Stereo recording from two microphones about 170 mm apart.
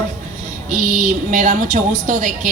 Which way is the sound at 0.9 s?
50° right (ahead or behind).